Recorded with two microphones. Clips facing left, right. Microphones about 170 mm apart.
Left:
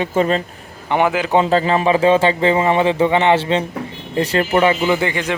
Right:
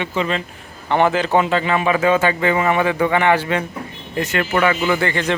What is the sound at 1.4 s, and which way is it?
A man's voice, 35° left (ahead or behind).